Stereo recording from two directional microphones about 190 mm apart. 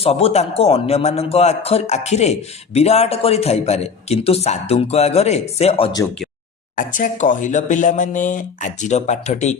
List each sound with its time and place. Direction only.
0.0 s speech: 30° left (ahead or behind)
6.7 s speech: 45° left (ahead or behind)